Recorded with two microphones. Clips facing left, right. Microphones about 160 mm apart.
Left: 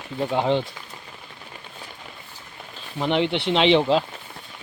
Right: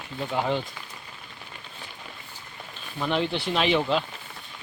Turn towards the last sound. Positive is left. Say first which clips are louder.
# left 5 dB
turn(degrees=30)  # may be behind; listen again after turning